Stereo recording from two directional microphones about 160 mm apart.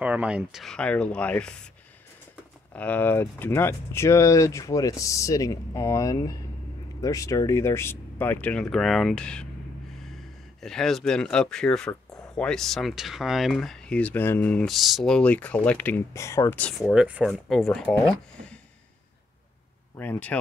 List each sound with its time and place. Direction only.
0.0 s speech: 10° right (ahead or behind); by 1.5 s 5° left (ahead or behind)
2.7 s speech: 10° left (ahead or behind)
16.9 s speech: 5° right (ahead or behind)
20.0 s speech: 10° left (ahead or behind)